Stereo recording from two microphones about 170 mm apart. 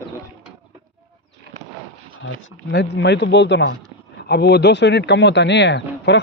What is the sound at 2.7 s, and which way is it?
Speech, 90° left.